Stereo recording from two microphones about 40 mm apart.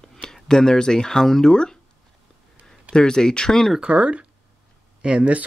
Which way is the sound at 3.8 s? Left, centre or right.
Right.